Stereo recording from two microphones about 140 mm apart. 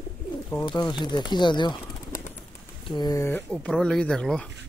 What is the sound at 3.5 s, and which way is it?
Speech, centre (ahead or behind).